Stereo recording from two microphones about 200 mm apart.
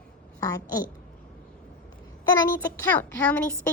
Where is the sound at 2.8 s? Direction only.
10° left (ahead or behind).